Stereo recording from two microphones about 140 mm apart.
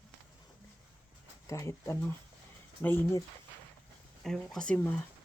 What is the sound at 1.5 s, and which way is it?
Speech, 20° left (ahead or behind).